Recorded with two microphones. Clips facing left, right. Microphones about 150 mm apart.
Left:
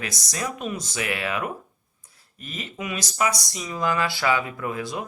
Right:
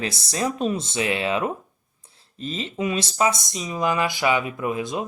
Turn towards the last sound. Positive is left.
turn(degrees=-20)  # may be behind; listen again after turning